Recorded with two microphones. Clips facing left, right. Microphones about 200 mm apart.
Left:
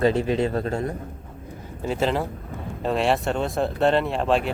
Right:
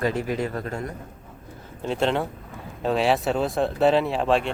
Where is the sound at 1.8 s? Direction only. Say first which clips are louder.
Even; centre (ahead or behind).